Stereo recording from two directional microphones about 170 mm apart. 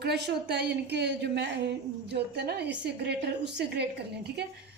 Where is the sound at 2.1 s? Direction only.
75° right (ahead or behind).